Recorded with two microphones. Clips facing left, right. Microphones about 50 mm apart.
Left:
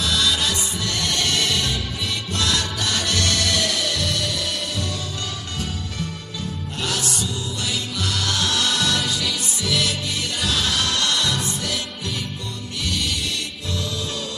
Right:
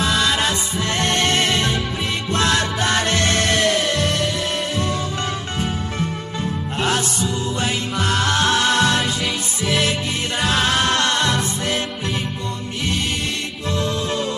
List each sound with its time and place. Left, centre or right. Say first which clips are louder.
0.0 s music: right 3 dB; right
6.8 s music: right 5 dB; right